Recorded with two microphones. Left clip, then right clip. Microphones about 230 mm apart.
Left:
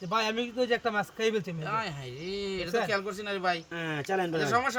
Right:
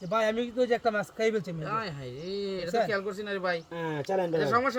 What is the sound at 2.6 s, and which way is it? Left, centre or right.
Speech, left.